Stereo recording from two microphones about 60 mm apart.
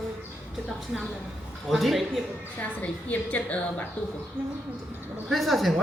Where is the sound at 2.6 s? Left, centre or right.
Left.